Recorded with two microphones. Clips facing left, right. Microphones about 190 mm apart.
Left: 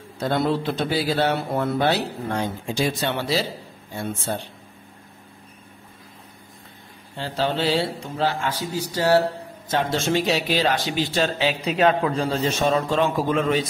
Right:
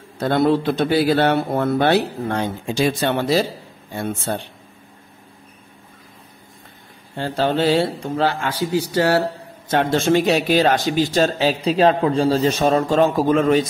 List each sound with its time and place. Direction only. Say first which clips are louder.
0.2 s speech: right 5 dB; 60° right (ahead or behind)
7.2 s a man's voice: right 5 dB; 50° right (ahead or behind); by 9.1 s 65° right (ahead or behind)
9.7 s a man's voice: right 5 dB; 55° right (ahead or behind)